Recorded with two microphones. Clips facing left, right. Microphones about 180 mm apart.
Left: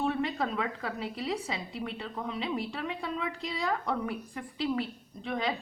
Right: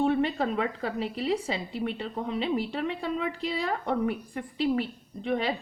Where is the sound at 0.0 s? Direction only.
30° right (ahead or behind).